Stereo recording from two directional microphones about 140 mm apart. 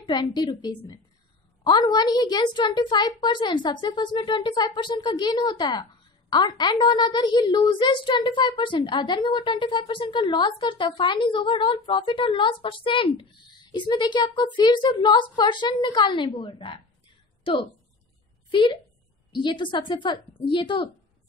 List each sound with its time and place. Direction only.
0.0 s a woman's voice: 30° left (ahead or behind)
17.4 s a sound: 40° left (ahead or behind)
18.5 s a woman's voice: 35° left (ahead or behind)